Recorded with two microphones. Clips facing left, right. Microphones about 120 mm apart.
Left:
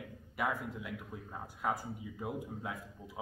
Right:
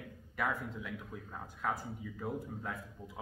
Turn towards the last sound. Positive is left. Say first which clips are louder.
# left 1 dB
turn(degrees=10)  # may be behind; listen again after turning